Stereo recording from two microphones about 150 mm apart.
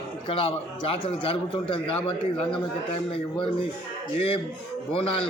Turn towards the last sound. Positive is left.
turn(degrees=40)  # may be behind; listen again after turning